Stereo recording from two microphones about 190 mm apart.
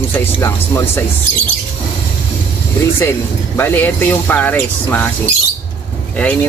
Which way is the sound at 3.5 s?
10° left (ahead or behind).